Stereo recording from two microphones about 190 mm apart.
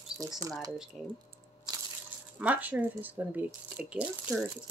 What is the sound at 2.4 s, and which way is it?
Speech, 10° right (ahead or behind).